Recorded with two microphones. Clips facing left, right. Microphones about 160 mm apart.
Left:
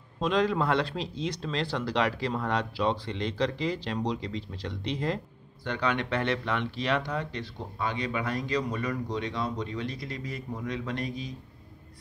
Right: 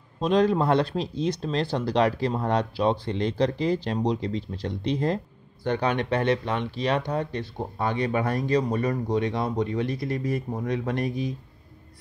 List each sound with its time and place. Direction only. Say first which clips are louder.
0.2 s speech: right 5 dB; 45° right (ahead or behind)
8.4 s speech: right 6 dB; 40° right (ahead or behind)